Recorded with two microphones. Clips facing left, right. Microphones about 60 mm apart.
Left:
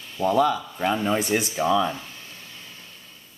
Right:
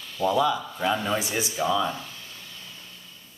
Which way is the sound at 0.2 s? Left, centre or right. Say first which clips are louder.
Left 1 dB; left.